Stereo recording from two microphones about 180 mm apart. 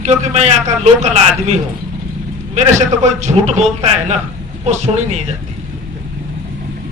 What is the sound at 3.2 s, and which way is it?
A man's voice, 40° right (ahead or behind).